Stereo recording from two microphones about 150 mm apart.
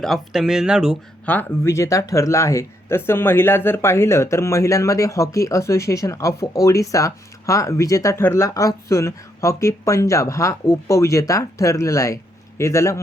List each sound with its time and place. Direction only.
0.0 s speech: centre (ahead or behind)
1.2 s speech: 10° left (ahead or behind)